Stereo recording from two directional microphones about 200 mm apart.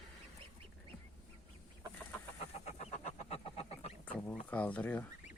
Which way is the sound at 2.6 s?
35° left (ahead or behind).